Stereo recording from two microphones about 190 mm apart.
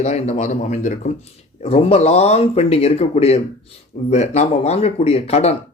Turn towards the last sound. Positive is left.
turn(degrees=35)  # may be behind; listen again after turning